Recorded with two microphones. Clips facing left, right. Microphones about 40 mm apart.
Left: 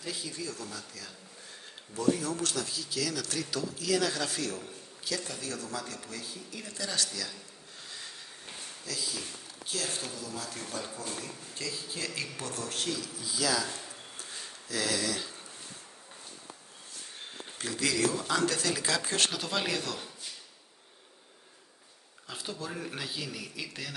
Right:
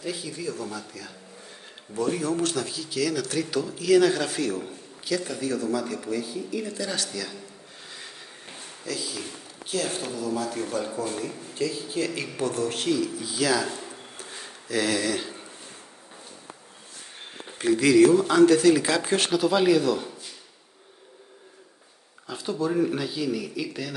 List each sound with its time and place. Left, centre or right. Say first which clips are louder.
0.0 s speech: right 6 dB; centre
8.8 s speech: right 6 dB; centre
13.7 s a sound: right 6 dB; right
17.6 s speech: right 13 dB; right
19.3 s a man's voice: right 12 dB; centre
22.3 s a man's voice: right 12 dB; centre
22.9 s a man's voice: right 10 dB; centre